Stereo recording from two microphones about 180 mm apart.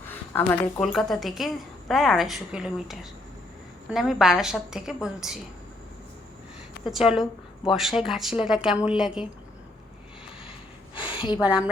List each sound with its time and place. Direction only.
0.1 s a woman's voice: 5° left (ahead or behind)
6.9 s a woman's voice: 5° right (ahead or behind)
10.9 s a sound: 30° left (ahead or behind)